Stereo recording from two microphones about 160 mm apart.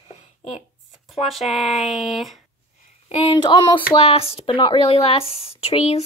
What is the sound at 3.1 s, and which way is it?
Speech, 30° left (ahead or behind).